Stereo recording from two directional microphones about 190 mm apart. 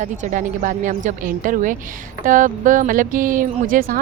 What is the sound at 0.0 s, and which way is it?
Speech, 40° right (ahead or behind).